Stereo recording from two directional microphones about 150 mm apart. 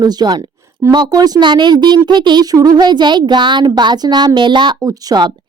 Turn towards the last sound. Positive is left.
turn(degrees=-25)  # may be behind; listen again after turning